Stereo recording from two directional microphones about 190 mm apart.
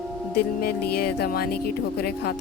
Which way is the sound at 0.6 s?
55° left (ahead or behind).